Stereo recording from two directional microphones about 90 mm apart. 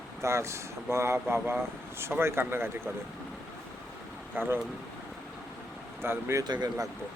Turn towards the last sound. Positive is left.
turn(degrees=-45)  # may be behind; listen again after turning